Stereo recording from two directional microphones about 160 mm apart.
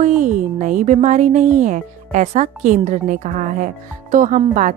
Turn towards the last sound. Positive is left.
turn(degrees=-50)  # may be behind; listen again after turning